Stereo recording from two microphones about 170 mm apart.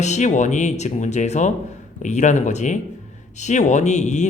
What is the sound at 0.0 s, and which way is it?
A man's voice, 45° left (ahead or behind).